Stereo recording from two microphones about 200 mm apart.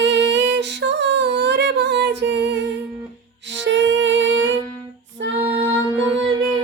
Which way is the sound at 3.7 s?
65° right (ahead or behind).